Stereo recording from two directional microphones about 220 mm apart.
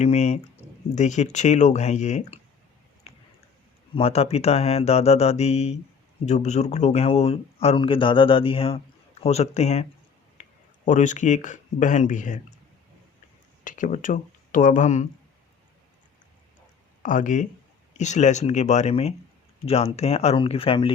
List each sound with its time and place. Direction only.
0.0 s speech: 30° left (ahead or behind)
3.9 s speech: 25° left (ahead or behind)
10.8 s speech: 35° left (ahead or behind)
13.7 s speech: 35° left (ahead or behind)
17.0 s speech: 35° left (ahead or behind)